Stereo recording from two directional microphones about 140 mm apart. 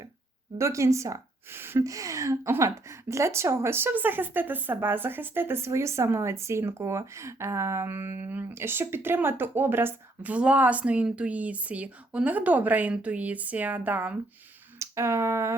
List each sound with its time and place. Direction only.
0.6 s a woman's voice: 20° right (ahead or behind)